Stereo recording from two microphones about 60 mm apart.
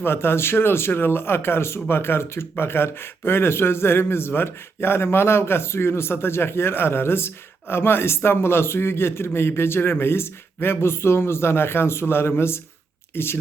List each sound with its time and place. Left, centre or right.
0.0 s a man's voice: left